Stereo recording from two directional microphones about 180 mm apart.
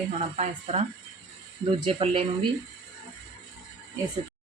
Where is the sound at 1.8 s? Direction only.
30° right (ahead or behind).